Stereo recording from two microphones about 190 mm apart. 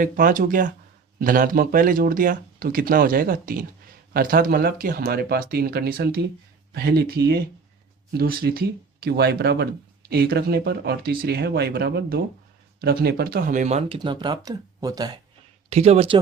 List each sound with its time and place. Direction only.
0.0 s speech: 45° right (ahead or behind); by 15.2 s 20° right (ahead or behind)
15.7 s speech: 35° right (ahead or behind)